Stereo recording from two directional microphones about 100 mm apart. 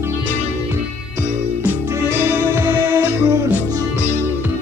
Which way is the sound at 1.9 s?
25° right (ahead or behind).